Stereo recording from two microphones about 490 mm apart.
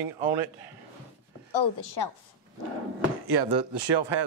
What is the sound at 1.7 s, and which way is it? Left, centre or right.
Speech, left.